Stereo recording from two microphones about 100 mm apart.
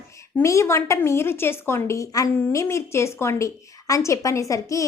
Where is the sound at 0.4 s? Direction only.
30° left (ahead or behind).